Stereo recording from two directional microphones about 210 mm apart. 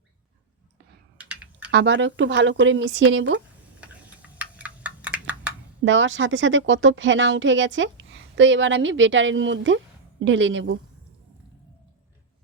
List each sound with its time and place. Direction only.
1.2 s typing: 5° right (ahead or behind)
1.7 s speech: 60° right (ahead or behind)
3.8 s a sound: 5° right (ahead or behind)
5.8 s speech: 65° right (ahead or behind)